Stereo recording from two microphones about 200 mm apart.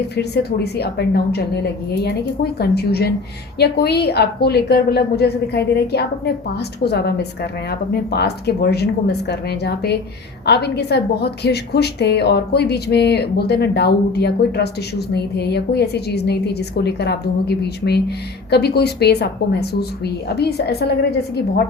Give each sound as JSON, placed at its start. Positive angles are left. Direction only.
{"t": 0.2, "sound": "a woman's voice", "side_deg": 55}